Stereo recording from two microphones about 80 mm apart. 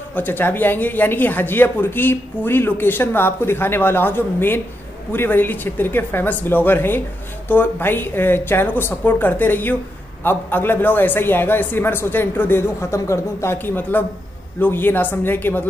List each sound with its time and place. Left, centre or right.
0.1 s speech: left